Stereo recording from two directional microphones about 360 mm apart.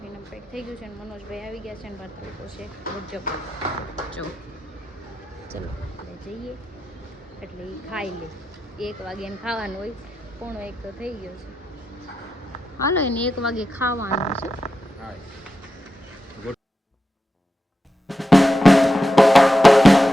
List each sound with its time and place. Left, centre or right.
0.5 s speech: centre
3.1 s speech: centre
7.4 s speech: centre
12.8 s speech: centre
14.1 s speech: centre
18.1 s drum: centre